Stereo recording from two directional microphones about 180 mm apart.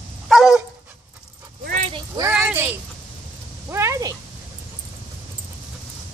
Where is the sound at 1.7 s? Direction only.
40° right (ahead or behind).